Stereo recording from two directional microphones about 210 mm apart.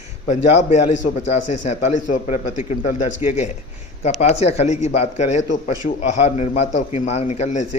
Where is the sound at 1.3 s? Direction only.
30° left (ahead or behind).